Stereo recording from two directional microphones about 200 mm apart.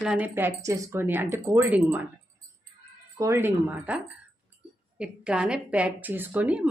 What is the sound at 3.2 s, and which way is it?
Speech, 10° right (ahead or behind).